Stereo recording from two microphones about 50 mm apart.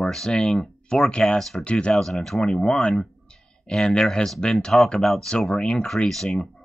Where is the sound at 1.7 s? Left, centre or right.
Left.